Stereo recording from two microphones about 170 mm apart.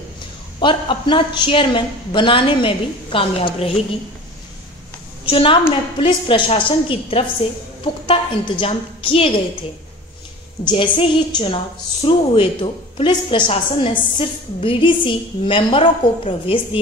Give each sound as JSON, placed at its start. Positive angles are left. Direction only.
{"t": 0.6, "sound": "a woman's voice", "side_deg": 30}
{"t": 5.2, "sound": "a woman's voice", "side_deg": 30}
{"t": 10.6, "sound": "a woman's voice", "side_deg": 30}